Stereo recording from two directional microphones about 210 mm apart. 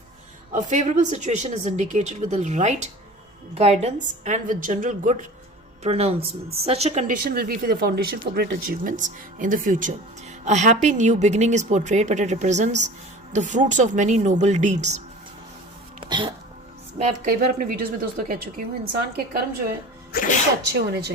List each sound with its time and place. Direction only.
0.5 s a woman's voice: 35° right (ahead or behind)
16.0 s music: 25° right (ahead or behind)
17.0 s a woman's voice: 35° right (ahead or behind)
20.1 s speech: 40° left (ahead or behind)
20.7 s a woman's voice: 50° right (ahead or behind)